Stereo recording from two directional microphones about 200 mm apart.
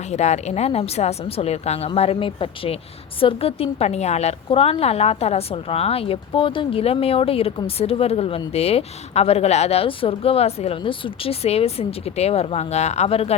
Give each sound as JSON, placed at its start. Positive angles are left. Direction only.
{"t": 0.0, "sound": "a woman's voice", "side_deg": 35}